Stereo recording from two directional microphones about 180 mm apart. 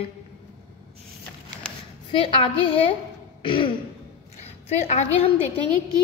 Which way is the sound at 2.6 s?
30° left (ahead or behind).